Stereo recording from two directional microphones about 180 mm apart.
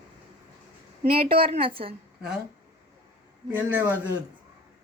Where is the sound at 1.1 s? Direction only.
55° right (ahead or behind).